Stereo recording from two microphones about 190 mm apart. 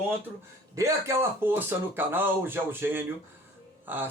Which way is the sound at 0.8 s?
15° right (ahead or behind).